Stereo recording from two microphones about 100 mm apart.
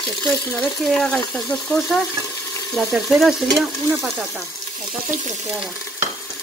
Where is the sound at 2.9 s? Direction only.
Centre (ahead or behind).